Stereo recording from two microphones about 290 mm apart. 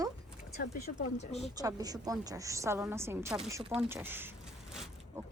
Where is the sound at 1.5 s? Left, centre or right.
Centre.